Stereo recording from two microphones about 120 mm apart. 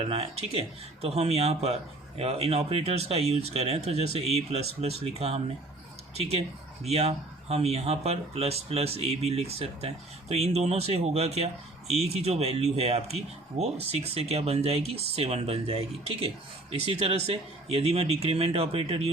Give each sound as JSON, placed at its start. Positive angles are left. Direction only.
{"t": 0.1, "sound": "speech", "side_deg": -55}
{"t": 6.8, "sound": "a man's voice", "side_deg": -60}